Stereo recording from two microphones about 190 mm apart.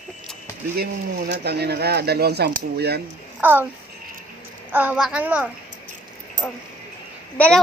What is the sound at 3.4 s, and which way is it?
Speech, 10° right (ahead or behind).